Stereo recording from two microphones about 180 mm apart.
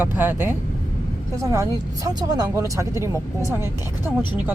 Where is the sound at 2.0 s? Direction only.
20° right (ahead or behind).